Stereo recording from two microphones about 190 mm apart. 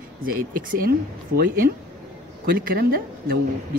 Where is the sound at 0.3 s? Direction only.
45° right (ahead or behind).